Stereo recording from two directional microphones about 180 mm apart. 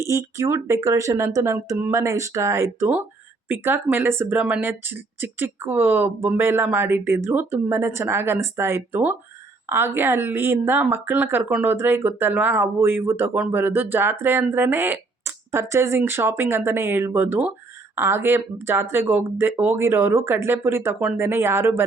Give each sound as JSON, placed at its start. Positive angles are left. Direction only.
{"t": 0.0, "sound": "speech", "side_deg": -15}